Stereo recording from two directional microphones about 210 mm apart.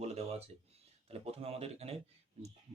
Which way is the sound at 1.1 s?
30° right (ahead or behind).